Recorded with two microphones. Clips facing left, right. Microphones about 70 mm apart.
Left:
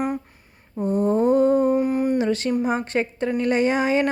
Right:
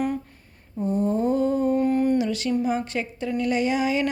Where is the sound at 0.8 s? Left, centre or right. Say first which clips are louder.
Left 4 dB; left.